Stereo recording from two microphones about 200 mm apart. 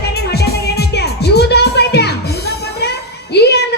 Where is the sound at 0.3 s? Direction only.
55° left (ahead or behind).